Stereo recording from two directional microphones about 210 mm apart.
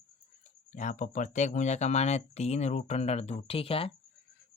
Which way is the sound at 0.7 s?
35° left (ahead or behind).